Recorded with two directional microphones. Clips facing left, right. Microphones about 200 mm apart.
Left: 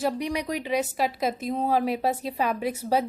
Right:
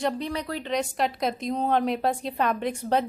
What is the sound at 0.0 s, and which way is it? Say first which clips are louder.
A woman's voice: left 1 dB; 15° left (ahead or behind).